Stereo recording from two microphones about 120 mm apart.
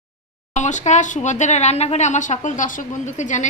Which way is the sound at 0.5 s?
90° left.